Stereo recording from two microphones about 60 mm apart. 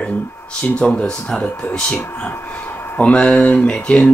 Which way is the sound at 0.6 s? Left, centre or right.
Centre.